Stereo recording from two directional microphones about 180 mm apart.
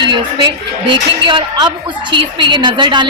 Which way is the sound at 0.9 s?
25° right (ahead or behind).